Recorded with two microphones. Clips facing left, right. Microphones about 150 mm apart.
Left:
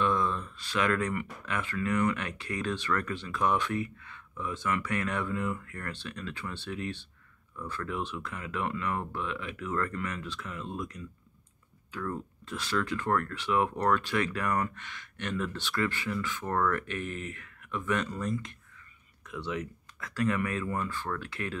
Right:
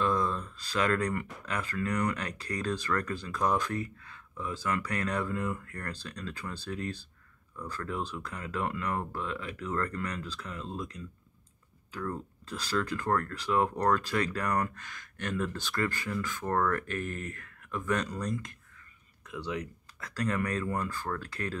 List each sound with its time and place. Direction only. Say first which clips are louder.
0.0 s speech: left 1 dB; 35° right (ahead or behind)